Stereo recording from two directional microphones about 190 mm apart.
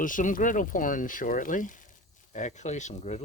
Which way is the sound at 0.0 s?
45° left (ahead or behind).